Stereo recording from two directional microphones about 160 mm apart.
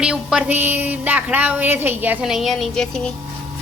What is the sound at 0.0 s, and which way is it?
A woman's voice, 5° right (ahead or behind).